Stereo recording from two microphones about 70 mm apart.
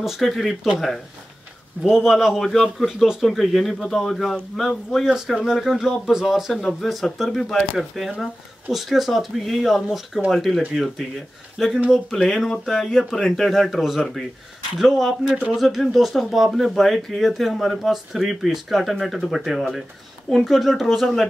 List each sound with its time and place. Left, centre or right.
0.0 s a man's voice: centre
1.8 s a man's voice: centre